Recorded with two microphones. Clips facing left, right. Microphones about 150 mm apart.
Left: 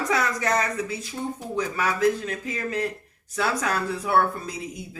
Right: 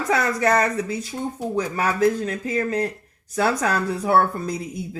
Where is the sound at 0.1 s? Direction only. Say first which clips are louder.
Right 6 dB; 35° right (ahead or behind).